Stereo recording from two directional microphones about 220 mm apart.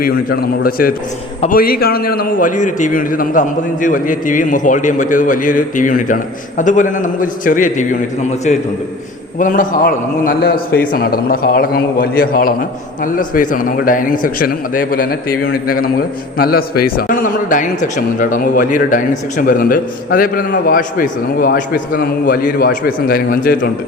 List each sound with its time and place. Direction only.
0.0 s a man's voice: 45° left (ahead or behind)